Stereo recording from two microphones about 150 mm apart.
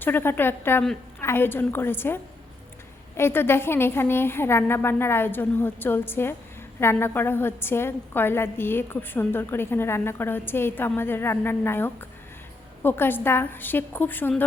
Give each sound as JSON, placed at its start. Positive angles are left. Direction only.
{"t": 0.0, "sound": "a woman's voice", "side_deg": 15}